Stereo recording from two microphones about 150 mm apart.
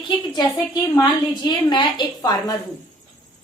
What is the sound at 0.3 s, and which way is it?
A woman's voice, 25° left (ahead or behind).